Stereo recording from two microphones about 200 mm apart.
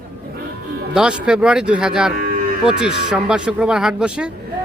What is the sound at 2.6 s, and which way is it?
Speech, 5° right (ahead or behind).